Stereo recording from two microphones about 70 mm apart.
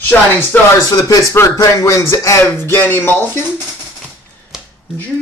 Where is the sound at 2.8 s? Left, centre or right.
Left.